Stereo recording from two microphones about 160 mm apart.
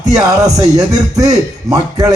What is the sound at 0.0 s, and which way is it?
A man's voice, 20° right (ahead or behind).